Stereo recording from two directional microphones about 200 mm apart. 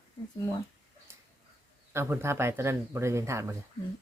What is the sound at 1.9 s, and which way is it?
Speech, 10° right (ahead or behind).